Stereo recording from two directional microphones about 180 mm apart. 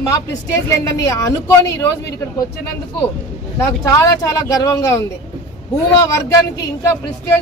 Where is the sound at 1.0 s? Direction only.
15° left (ahead or behind).